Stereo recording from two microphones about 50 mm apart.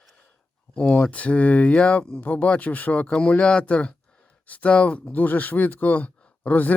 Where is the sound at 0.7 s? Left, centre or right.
Centre.